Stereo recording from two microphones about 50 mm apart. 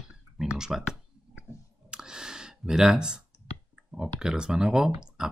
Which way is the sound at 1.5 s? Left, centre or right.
Left.